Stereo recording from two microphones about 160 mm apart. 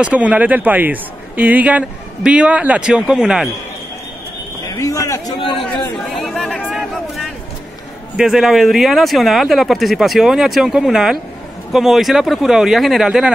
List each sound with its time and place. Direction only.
0.0 s speech: 10° right (ahead or behind)
4.6 s a sound: 20° left (ahead or behind)
5.4 s chatter: 30° left (ahead or behind)
6.0 s chatter: centre (ahead or behind)
8.2 s speech: centre (ahead or behind)